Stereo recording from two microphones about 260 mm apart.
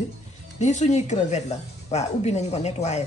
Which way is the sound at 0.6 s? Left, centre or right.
Left.